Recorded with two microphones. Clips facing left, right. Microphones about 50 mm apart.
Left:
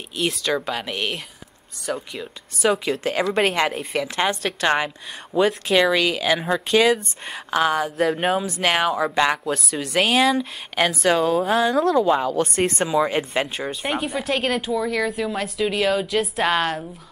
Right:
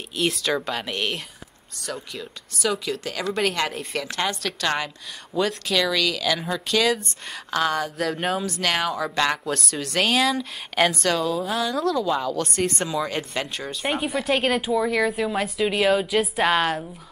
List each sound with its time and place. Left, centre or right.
0.1 s speech: centre
1.9 s speech: centre
2.6 s speech: left
3.7 s a woman's voice: centre
11.2 s a woman's voice: left
13.8 s speech: centre